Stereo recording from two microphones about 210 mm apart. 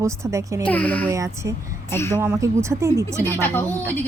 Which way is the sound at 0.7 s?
5° left (ahead or behind).